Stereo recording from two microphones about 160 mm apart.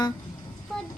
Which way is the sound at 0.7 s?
Centre (ahead or behind).